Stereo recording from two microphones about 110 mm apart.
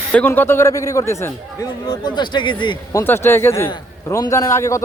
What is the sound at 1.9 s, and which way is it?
Speech, 40° left (ahead or behind).